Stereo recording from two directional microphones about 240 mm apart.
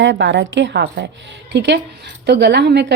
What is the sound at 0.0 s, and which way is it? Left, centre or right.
A woman's voice, right.